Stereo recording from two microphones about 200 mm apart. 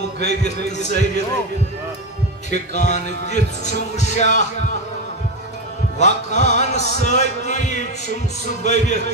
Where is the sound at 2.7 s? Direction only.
35° left (ahead or behind).